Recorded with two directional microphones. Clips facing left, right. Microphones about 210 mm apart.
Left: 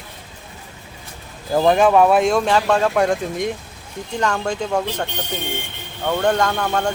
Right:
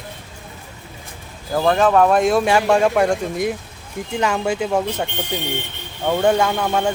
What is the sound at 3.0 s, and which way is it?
Speech, centre (ahead or behind).